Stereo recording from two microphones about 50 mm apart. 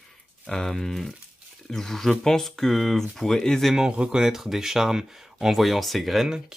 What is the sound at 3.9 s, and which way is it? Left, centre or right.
Speech, centre.